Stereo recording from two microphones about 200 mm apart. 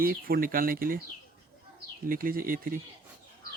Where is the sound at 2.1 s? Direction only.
45° right (ahead or behind).